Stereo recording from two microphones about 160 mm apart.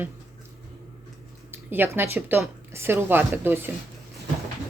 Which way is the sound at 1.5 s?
15° right (ahead or behind).